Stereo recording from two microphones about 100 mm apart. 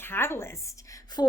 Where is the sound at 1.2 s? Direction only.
45° left (ahead or behind).